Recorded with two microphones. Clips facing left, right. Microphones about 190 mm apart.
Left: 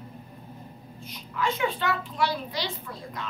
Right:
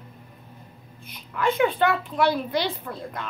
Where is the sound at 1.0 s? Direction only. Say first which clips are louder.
Right 4 dB; 55° right (ahead or behind).